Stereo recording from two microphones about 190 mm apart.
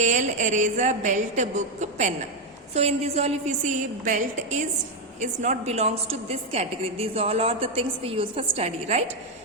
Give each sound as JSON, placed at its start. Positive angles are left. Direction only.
{"t": 0.0, "sound": "a woman's voice", "side_deg": -40}